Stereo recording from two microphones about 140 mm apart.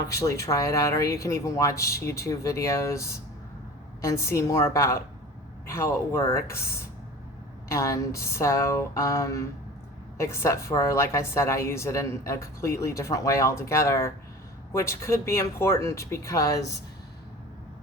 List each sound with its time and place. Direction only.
0.1 s a woman's voice: 20° left (ahead or behind)